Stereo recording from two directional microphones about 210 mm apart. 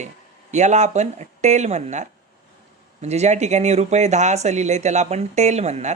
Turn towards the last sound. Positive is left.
turn(degrees=-30)  # may be behind; listen again after turning